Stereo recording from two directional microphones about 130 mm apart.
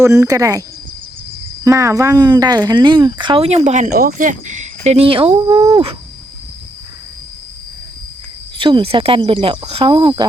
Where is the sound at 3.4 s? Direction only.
55° right (ahead or behind); by 4.3 s 75° right (ahead or behind).